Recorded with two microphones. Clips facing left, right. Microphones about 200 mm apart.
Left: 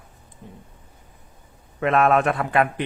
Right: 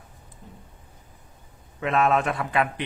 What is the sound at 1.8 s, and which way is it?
Speech, 60° left (ahead or behind).